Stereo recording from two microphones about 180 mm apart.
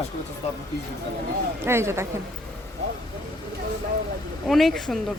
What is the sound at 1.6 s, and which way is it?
Speech, 15° right (ahead or behind).